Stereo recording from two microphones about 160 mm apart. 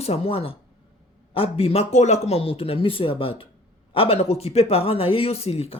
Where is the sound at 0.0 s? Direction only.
40° left (ahead or behind).